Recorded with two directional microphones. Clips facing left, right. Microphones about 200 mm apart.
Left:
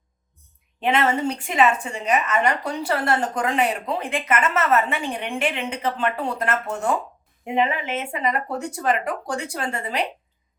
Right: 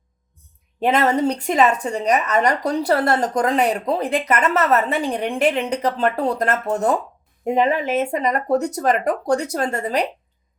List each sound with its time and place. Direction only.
0.8 s a woman's voice: 40° right (ahead or behind)